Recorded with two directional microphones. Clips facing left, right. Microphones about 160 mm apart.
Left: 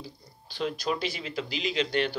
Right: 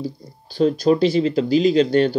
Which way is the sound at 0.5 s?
40° right (ahead or behind).